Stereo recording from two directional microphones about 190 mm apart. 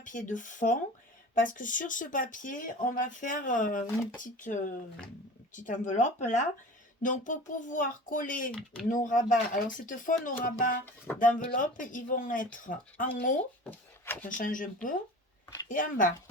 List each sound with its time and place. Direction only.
0.0 s speech: 40° left (ahead or behind)
10.8 s speech: 10° left (ahead or behind)
11.2 s speech: 45° left (ahead or behind)
13.7 s wood: 10° left (ahead or behind)
14.3 s speech: 45° left (ahead or behind)